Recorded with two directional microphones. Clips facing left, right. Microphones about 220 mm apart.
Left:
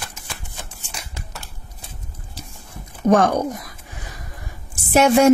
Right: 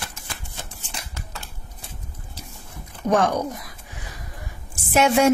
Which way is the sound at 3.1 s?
45° left (ahead or behind).